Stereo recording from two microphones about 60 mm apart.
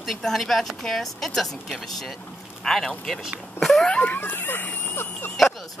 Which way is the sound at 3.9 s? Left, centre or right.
Left.